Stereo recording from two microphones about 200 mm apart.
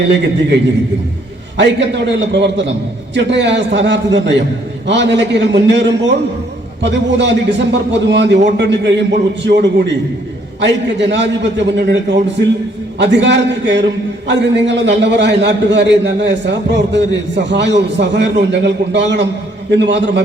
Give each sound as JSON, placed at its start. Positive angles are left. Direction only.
{"t": 0.0, "sound": "a man's voice", "side_deg": -60}
{"t": 1.5, "sound": "a man's voice", "side_deg": -60}